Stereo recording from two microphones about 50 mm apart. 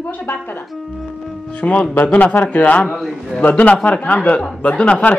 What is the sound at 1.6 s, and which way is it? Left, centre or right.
A woman's voice, left.